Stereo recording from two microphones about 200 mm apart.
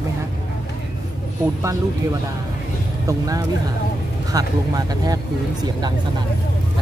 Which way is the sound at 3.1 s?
15° right (ahead or behind).